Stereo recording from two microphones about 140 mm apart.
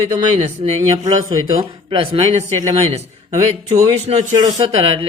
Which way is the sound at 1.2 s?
25° right (ahead or behind).